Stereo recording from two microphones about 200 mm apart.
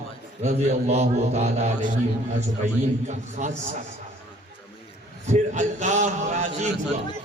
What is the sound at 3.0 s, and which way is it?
Speech, 35° right (ahead or behind).